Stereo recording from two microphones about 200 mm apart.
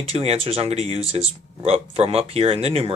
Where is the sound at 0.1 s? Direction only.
30° right (ahead or behind).